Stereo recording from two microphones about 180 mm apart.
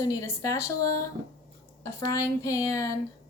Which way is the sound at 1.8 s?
15° left (ahead or behind).